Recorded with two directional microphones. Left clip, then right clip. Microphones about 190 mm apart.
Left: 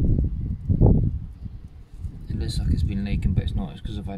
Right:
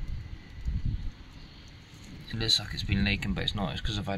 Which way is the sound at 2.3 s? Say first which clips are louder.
Right 7 dB; 10° left (ahead or behind).